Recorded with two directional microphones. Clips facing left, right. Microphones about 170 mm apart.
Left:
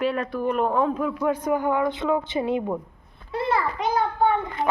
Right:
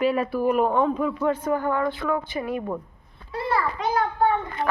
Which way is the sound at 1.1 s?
10° left (ahead or behind).